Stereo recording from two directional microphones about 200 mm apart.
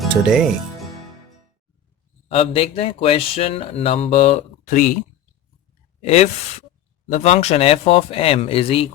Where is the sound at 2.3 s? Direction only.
30° left (ahead or behind).